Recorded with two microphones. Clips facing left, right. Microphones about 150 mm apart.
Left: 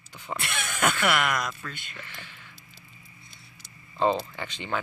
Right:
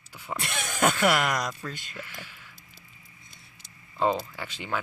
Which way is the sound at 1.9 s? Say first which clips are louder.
Right 3 dB; 10° right (ahead or behind).